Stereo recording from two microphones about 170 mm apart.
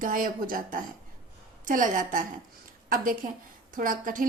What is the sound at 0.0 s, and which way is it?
A woman's voice, 55° right (ahead or behind).